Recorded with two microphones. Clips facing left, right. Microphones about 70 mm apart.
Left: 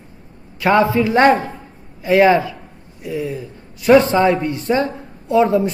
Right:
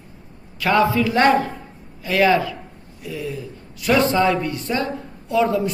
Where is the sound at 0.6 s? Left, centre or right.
Left.